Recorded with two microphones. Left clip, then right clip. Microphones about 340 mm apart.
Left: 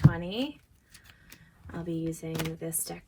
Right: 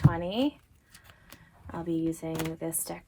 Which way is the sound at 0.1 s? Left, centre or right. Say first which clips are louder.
Right 3 dB; right.